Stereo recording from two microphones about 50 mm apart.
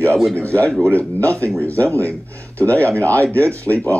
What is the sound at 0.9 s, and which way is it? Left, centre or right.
Speech, left.